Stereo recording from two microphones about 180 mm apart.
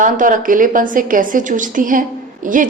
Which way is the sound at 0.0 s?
45° right (ahead or behind).